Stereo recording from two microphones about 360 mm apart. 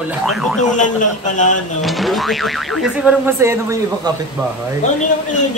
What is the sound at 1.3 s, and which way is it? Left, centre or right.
Speech, left.